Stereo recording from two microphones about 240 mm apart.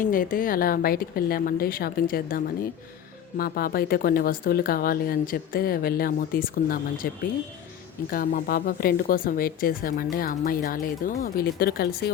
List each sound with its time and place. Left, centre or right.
0.0 s speech: left
8.1 s speech: left